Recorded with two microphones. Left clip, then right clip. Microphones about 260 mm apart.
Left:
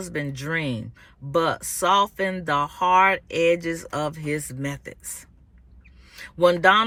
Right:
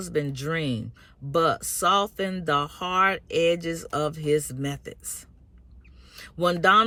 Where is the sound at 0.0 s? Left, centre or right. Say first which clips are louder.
Right 2 dB; centre.